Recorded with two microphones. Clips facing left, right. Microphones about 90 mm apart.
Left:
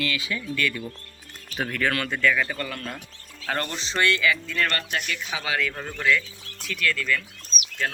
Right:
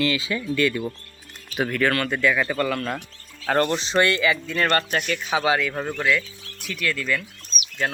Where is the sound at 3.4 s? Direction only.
45° right (ahead or behind).